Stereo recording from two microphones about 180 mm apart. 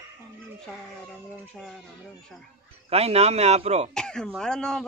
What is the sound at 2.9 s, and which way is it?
Speech, 35° right (ahead or behind).